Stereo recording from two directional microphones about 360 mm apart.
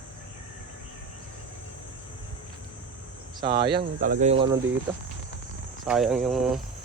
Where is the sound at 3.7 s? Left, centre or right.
Right.